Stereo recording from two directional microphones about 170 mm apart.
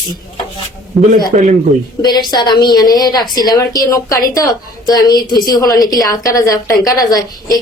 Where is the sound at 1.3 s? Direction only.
50° right (ahead or behind).